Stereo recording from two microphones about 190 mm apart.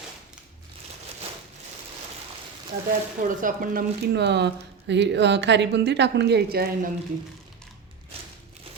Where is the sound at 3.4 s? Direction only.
45° right (ahead or behind).